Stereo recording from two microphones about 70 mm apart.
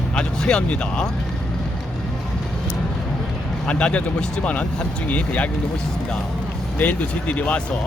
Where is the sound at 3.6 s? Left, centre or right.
Centre.